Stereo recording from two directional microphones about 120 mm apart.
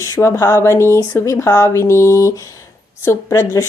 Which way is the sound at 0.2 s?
25° left (ahead or behind).